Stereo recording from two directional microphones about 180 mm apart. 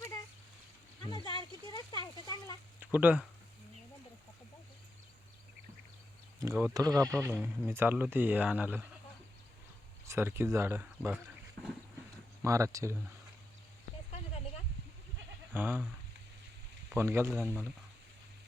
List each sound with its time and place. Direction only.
1.0 s a sound: 25° left (ahead or behind)
2.2 s speech: 20° left (ahead or behind)
2.8 s speech: 10° right (ahead or behind)
6.4 s a sound: 15° right (ahead or behind)
6.7 s speech: 20° right (ahead or behind)
10.1 s speech: 15° right (ahead or behind)
12.4 s speech: 15° right (ahead or behind)
15.5 s speech: 10° right (ahead or behind)
16.9 s speech: 15° right (ahead or behind)